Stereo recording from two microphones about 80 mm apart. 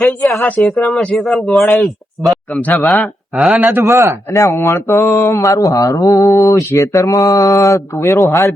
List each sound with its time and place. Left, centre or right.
0.0 s speech: centre
0.6 s speech: centre
1.2 s speech: centre
2.5 s speech: centre
2.7 s speech: centre
3.6 s a man's voice: right
3.8 s a man's voice: right
4.3 s mantra: left